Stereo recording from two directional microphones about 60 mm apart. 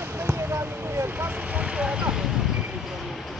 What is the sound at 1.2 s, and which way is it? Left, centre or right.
Vehicle, right.